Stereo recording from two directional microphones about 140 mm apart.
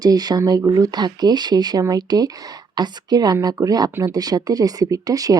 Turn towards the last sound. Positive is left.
turn(degrees=-25)  # may be behind; listen again after turning